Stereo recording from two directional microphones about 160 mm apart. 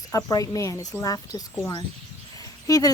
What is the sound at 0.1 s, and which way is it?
Speech, 20° left (ahead or behind).